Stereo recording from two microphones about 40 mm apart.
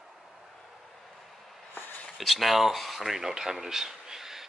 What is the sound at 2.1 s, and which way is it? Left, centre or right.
Speech, centre.